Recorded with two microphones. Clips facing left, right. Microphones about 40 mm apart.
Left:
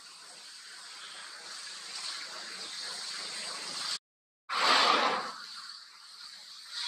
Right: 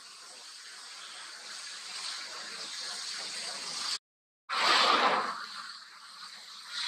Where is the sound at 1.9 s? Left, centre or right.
Centre.